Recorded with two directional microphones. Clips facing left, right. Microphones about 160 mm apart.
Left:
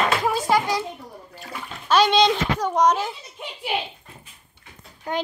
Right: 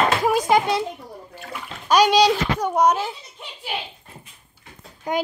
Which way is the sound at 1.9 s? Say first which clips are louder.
Right 2 dB; 10° right (ahead or behind).